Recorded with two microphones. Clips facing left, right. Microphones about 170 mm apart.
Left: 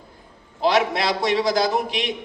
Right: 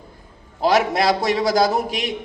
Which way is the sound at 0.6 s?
40° right (ahead or behind).